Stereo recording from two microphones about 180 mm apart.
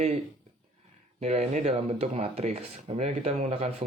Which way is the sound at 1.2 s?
35° right (ahead or behind).